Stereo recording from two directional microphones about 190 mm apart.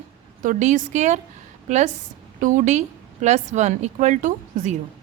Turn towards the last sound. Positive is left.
turn(degrees=-40)  # may be behind; listen again after turning